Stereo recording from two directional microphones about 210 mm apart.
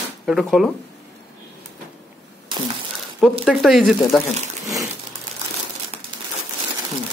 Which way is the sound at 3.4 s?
Centre (ahead or behind).